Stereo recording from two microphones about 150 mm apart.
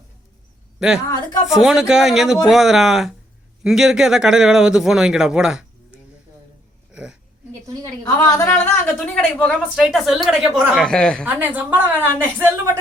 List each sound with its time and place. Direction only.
0.8 s a man's voice: 5° right (ahead or behind)
6.9 s a sound: 5° right (ahead or behind)
8.0 s speech: 20° left (ahead or behind)
9.0 s speech: 5° left (ahead or behind)
10.8 s speech: 5° left (ahead or behind)
11.3 s a woman's voice: 10° right (ahead or behind)